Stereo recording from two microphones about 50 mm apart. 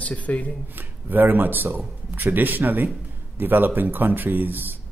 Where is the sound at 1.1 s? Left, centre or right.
Right.